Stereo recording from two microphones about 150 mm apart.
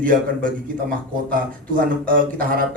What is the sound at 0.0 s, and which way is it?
A man's voice, 65° right (ahead or behind).